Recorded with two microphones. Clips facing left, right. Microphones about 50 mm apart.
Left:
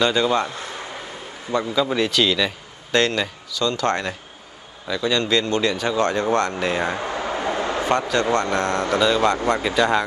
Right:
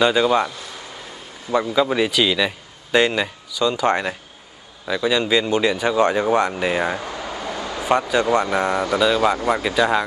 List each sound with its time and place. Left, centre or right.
0.0 s a man's voice: centre
1.5 s a man's voice: centre
7.0 s a sound: left
8.1 s a man's voice: centre